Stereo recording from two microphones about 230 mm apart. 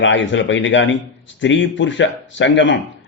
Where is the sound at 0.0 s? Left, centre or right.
Left.